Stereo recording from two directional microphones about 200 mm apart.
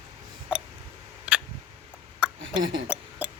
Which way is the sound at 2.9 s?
5° right (ahead or behind).